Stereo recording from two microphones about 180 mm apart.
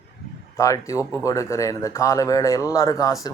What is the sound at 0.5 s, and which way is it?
Speech, 15° left (ahead or behind).